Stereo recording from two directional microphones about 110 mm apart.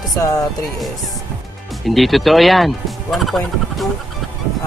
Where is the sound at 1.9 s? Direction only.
Centre (ahead or behind).